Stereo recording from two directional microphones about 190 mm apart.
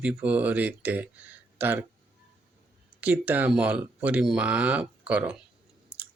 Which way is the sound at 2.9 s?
10° right (ahead or behind).